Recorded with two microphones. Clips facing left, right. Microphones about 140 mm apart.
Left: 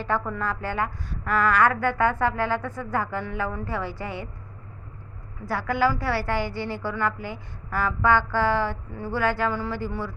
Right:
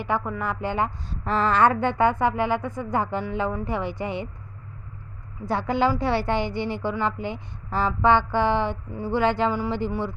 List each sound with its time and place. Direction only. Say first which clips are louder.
0.0 s a woman's voice: even; 15° right (ahead or behind)
5.5 s a woman's voice: right 1 dB; 20° right (ahead or behind)